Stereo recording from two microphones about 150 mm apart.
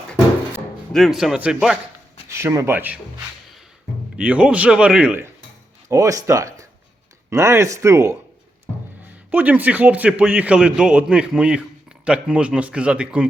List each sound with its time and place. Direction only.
0.9 s speech: centre (ahead or behind)
2.3 s a man's voice: 20° right (ahead or behind)
4.2 s a man's voice: 10° right (ahead or behind)
5.9 s speech: 25° right (ahead or behind)
9.3 s a man's voice: 10° right (ahead or behind)